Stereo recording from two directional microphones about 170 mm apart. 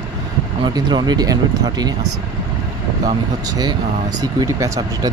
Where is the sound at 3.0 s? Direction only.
20° right (ahead or behind).